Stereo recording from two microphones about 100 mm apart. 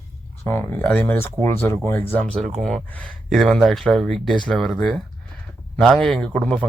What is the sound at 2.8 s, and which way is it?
Speech, 15° left (ahead or behind).